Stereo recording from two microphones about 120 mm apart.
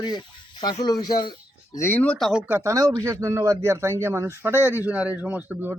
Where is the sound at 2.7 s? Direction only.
30° right (ahead or behind); by 5.7 s 15° right (ahead or behind).